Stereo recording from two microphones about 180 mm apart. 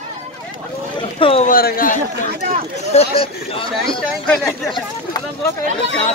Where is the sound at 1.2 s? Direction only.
30° left (ahead or behind).